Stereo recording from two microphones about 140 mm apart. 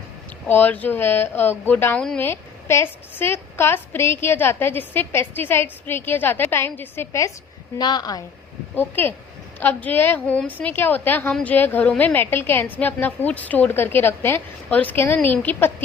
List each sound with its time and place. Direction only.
0.4 s a woman's voice: 10° left (ahead or behind)
7.8 s a woman's voice: 30° left (ahead or behind)
8.7 s a woman's voice: 15° left (ahead or behind)